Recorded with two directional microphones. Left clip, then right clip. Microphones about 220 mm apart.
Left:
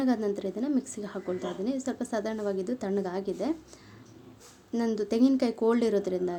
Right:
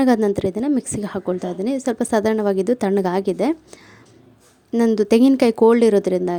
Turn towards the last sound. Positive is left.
turn(degrees=-40)  # may be behind; listen again after turning